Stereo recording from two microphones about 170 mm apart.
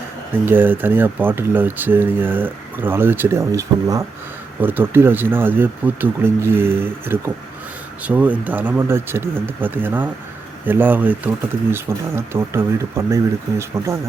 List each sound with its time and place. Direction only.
0.4 s speech: 10° right (ahead or behind)